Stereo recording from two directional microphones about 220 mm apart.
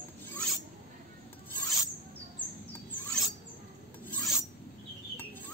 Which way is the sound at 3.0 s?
5° left (ahead or behind).